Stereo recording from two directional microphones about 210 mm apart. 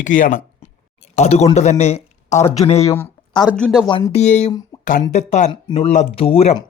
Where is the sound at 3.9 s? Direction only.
25° left (ahead or behind).